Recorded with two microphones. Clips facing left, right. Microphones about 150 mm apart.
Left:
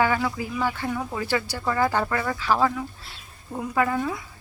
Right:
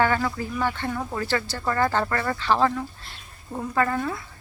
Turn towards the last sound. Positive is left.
turn(degrees=10)  # may be behind; listen again after turning